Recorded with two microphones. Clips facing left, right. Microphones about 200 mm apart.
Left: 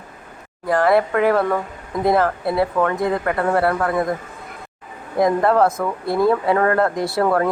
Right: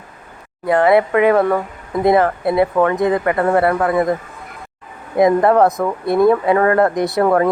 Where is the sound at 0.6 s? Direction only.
20° right (ahead or behind).